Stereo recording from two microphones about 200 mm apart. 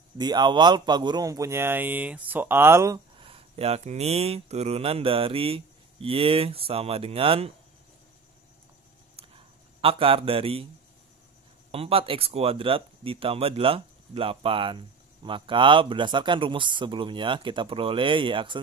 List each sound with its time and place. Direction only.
0.2 s a man's voice: 20° right (ahead or behind)
3.2 s speech: 30° right (ahead or behind)
9.1 s a sound: 30° right (ahead or behind)
11.7 s speech: 30° right (ahead or behind)